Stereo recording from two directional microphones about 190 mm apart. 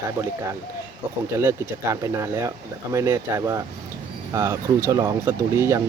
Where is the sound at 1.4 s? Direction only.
15° right (ahead or behind).